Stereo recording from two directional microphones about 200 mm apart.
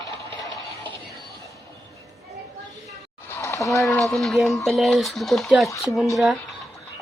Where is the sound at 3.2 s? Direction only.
15° left (ahead or behind).